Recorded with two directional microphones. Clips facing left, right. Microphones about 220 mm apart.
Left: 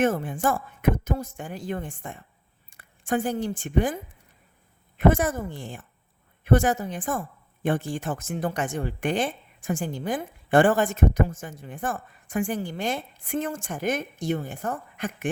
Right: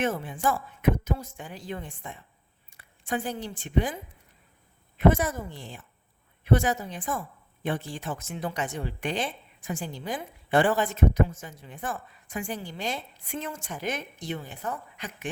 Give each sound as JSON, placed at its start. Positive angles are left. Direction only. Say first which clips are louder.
{"t": 0.0, "sound": "a woman's voice", "louder": "left 4 dB", "side_deg": 50}
{"t": 4.9, "sound": "a woman's voice", "louder": "left 2 dB", "side_deg": 50}